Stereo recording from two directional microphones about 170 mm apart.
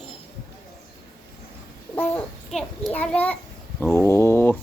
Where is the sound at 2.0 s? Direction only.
10° left (ahead or behind).